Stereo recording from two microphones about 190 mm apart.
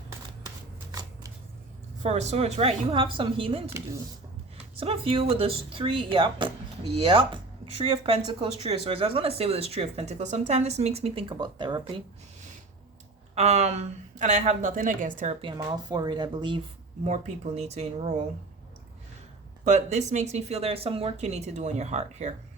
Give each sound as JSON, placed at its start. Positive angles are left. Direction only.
{"t": 0.9, "sound": "shuffling cards", "side_deg": -20}
{"t": 2.0, "sound": "speech", "side_deg": -35}
{"t": 4.8, "sound": "speech", "side_deg": -30}
{"t": 13.3, "sound": "speech", "side_deg": -35}
{"t": 15.4, "sound": "speech", "side_deg": -25}
{"t": 17.0, "sound": "speech", "side_deg": -40}
{"t": 19.6, "sound": "speech", "side_deg": -40}